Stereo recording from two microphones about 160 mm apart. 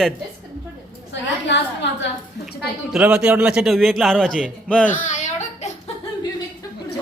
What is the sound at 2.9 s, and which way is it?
A man's voice, 5° right (ahead or behind).